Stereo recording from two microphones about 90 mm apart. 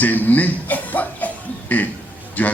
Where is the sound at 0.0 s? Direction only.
20° left (ahead or behind).